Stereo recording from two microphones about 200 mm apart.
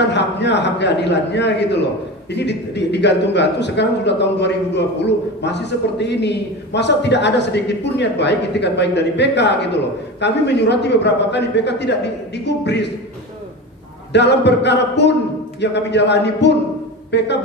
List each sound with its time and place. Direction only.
0.1 s a man's voice: 60° left (ahead or behind)
14.1 s a man's voice: 60° left (ahead or behind)